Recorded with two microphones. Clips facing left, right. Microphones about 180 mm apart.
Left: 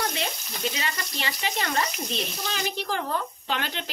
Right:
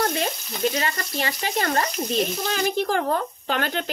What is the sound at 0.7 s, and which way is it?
Speech, 45° right (ahead or behind).